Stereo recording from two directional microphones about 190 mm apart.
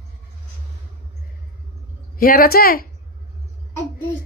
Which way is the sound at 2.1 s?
50° left (ahead or behind).